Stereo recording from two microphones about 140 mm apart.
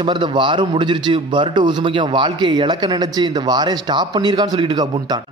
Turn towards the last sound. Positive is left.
turn(degrees=-30)  # may be behind; listen again after turning